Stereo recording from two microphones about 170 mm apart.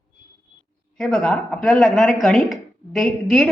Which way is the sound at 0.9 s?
5° left (ahead or behind).